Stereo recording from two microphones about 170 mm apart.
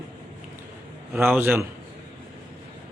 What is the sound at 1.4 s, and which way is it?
Speech, 10° right (ahead or behind).